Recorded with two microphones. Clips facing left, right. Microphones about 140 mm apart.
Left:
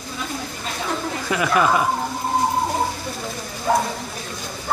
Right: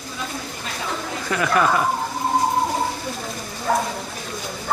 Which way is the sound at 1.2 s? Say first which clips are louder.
Even; 10° left (ahead or behind).